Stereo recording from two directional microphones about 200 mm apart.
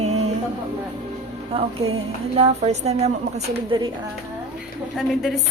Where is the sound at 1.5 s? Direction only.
30° right (ahead or behind).